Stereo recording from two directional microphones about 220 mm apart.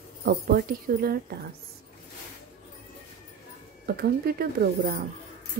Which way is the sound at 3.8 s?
45° right (ahead or behind).